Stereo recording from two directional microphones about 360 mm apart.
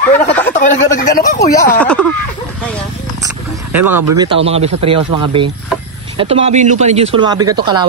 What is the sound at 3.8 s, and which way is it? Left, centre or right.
Speech, right.